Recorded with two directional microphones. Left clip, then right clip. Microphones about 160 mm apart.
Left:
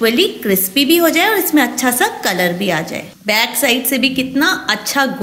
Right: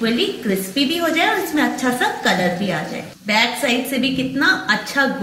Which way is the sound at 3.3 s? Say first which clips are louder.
Left 3 dB; 70° left (ahead or behind).